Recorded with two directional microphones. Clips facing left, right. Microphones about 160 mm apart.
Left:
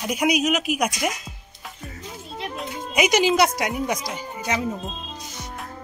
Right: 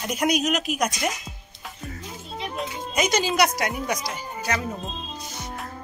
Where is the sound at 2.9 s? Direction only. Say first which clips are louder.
Left 4 dB; 15° left (ahead or behind).